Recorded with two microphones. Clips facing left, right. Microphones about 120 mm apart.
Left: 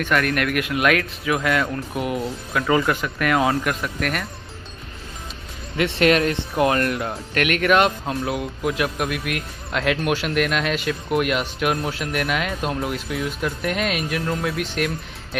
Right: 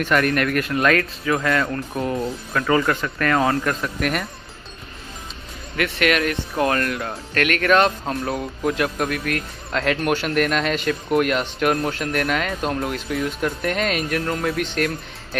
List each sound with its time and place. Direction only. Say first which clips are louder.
0.0 s speech: right 2 dB; centre (ahead or behind)
5.8 s speech: left 3 dB; 30° left (ahead or behind)
6.5 s speech: left 2 dB; 20° left (ahead or behind)
7.3 s speech: even; 10° left (ahead or behind)